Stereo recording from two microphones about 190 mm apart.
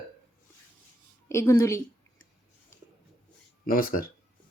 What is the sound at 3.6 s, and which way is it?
Speech, 50° left (ahead or behind).